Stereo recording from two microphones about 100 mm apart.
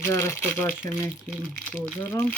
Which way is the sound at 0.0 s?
25° left (ahead or behind).